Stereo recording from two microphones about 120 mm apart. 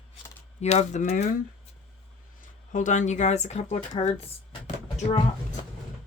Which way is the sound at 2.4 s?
90° left.